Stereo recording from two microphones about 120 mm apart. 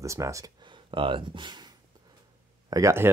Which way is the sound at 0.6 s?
45° right (ahead or behind).